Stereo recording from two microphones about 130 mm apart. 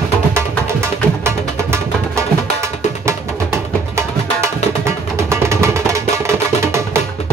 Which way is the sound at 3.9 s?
20° right (ahead or behind).